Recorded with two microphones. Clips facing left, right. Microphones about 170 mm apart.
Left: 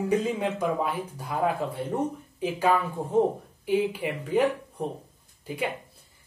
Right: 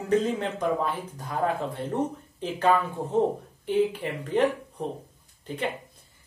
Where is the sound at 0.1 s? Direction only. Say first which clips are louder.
Right 4 dB; 10° left (ahead or behind).